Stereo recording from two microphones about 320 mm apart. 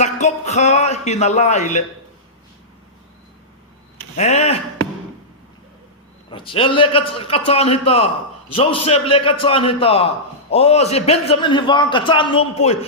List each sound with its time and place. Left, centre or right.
0.0 s speech: left
4.2 s speech: left
6.3 s a man's voice: centre